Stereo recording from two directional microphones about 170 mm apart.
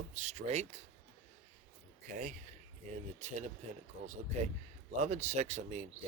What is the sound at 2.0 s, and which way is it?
Speech, 45° right (ahead or behind).